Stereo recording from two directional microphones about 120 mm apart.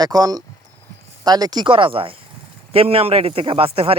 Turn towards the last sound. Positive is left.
turn(degrees=-50)  # may be behind; listen again after turning